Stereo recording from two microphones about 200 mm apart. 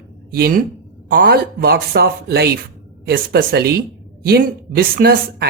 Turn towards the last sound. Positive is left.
turn(degrees=-50)  # may be behind; listen again after turning